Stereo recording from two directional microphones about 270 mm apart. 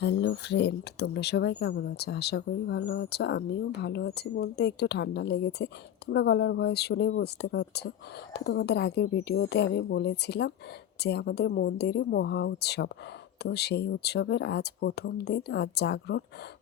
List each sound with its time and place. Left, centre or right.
0.0 s speech: left